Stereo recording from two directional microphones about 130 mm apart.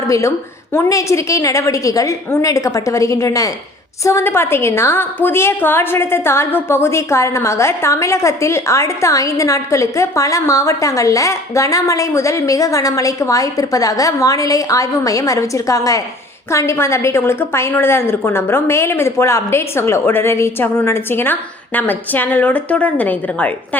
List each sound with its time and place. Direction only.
0.1 s a woman's voice: 25° left (ahead or behind)